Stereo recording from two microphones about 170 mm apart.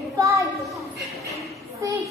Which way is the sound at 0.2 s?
15° right (ahead or behind).